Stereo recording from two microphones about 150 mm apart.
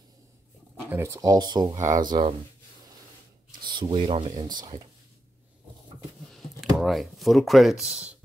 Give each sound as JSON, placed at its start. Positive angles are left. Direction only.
{"t": 0.8, "sound": "speech", "side_deg": -15}
{"t": 1.8, "sound": "speech", "side_deg": -55}
{"t": 2.0, "sound": "speech", "side_deg": -35}
{"t": 3.6, "sound": "a sound", "side_deg": -30}
{"t": 3.9, "sound": "speech", "side_deg": -40}
{"t": 6.3, "sound": "speech", "side_deg": 0}